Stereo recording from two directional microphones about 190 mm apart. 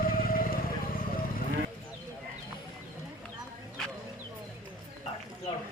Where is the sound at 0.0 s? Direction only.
50° left (ahead or behind).